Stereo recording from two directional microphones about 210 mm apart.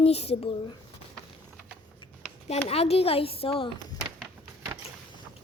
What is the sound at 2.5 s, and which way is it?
Speech, 30° left (ahead or behind).